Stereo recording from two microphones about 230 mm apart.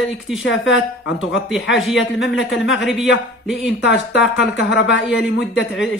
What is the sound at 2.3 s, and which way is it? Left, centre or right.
Speech, left.